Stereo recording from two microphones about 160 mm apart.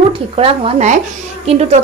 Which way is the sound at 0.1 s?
35° right (ahead or behind).